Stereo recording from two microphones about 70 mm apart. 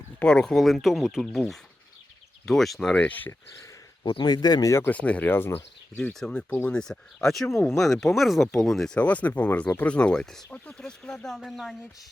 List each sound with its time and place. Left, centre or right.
0.2 s speech: centre
2.9 s speech: left
4.2 s speech: left
4.9 s speech: centre
6.1 s speech: centre
6.5 s speech: left
6.7 s speech: centre
9.0 s speech: left; by 11.8 s centre